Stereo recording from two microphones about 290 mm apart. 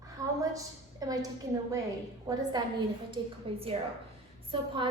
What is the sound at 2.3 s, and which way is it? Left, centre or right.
A woman's voice, centre.